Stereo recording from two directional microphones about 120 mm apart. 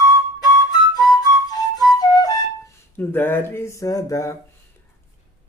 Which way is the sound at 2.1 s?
30° left (ahead or behind).